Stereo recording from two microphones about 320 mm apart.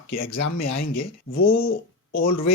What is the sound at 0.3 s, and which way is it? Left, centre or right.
Speech, left.